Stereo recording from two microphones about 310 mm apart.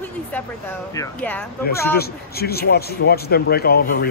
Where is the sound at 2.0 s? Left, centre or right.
Left.